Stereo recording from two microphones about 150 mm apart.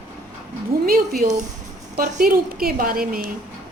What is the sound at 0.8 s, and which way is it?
Speech, 75° right (ahead or behind).